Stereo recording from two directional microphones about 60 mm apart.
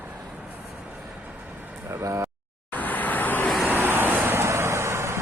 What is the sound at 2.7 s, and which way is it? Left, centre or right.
Vehicle, left.